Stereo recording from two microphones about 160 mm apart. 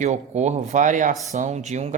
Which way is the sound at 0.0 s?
45° right (ahead or behind).